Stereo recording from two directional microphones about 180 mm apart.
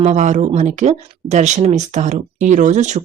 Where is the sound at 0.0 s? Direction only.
40° right (ahead or behind).